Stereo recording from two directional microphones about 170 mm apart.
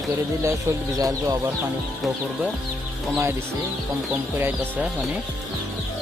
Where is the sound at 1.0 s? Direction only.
20° right (ahead or behind).